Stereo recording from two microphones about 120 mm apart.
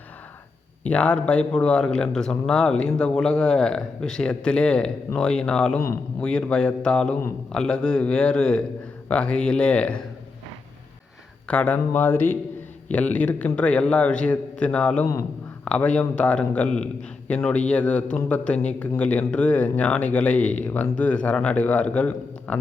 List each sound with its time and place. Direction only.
0.9 s speech: 10° left (ahead or behind)
11.4 s speech: 10° left (ahead or behind)
15.0 s a man's voice: 25° left (ahead or behind)
15.6 s speech: 10° left (ahead or behind)